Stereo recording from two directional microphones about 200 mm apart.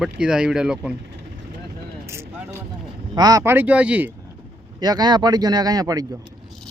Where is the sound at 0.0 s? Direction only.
5° right (ahead or behind).